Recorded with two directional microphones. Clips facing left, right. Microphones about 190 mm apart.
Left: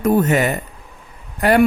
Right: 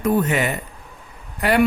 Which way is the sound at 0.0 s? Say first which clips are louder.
Left 4 dB; 45° left (ahead or behind).